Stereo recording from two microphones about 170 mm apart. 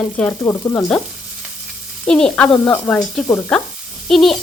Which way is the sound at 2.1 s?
5° left (ahead or behind).